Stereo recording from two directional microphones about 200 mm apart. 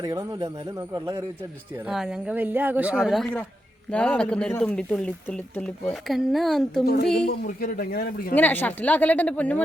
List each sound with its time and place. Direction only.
0.0 s a man's voice: 15° right (ahead or behind)
1.8 s speech: centre (ahead or behind)
6.8 s a man's voice: 55° left (ahead or behind)
8.4 s speech: 10° left (ahead or behind)